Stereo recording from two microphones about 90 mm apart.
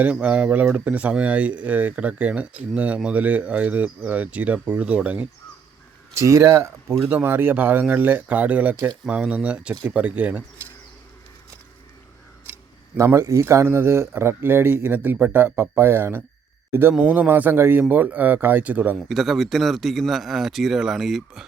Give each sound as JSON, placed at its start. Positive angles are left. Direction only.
{"t": 0.0, "sound": "speech", "side_deg": -15}
{"t": 6.2, "sound": "speech", "side_deg": -30}
{"t": 13.1, "sound": "speech", "side_deg": -35}
{"t": 18.9, "sound": "speech", "side_deg": 0}